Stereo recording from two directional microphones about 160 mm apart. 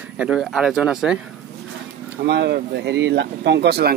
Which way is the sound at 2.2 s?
90° right.